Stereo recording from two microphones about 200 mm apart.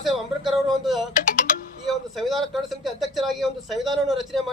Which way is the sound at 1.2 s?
40° left (ahead or behind).